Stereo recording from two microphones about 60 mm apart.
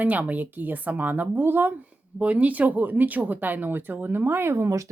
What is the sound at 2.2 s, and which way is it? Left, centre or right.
Speech, right.